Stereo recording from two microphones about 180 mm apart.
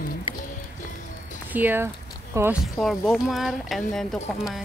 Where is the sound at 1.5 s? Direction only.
10° right (ahead or behind).